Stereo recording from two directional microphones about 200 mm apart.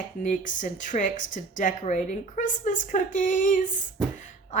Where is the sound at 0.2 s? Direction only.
40° left (ahead or behind).